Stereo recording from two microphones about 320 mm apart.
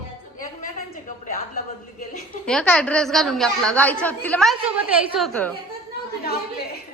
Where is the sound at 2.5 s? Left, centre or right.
Centre.